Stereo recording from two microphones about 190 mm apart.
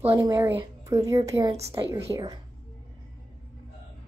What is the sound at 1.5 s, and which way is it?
Speech, 30° right (ahead or behind).